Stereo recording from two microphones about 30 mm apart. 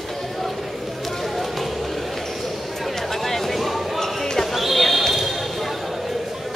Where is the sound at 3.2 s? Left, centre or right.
Centre.